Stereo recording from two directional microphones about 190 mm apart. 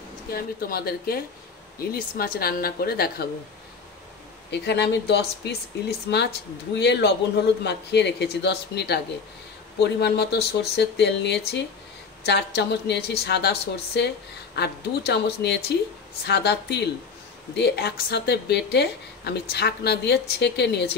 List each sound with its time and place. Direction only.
0.3 s speech: 50° left (ahead or behind)
4.5 s speech: 65° left (ahead or behind)